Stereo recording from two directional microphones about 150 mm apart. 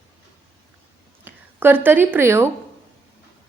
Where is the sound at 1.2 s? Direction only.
15° right (ahead or behind).